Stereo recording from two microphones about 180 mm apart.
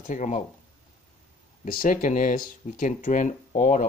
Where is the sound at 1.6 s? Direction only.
50° left (ahead or behind).